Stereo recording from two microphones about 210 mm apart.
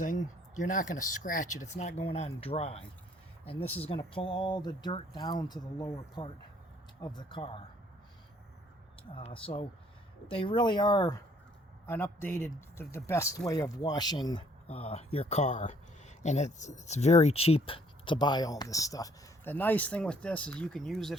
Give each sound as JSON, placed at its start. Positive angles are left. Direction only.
{"t": 0.0, "sound": "speech", "side_deg": 35}
{"t": 9.1, "sound": "speech", "side_deg": 25}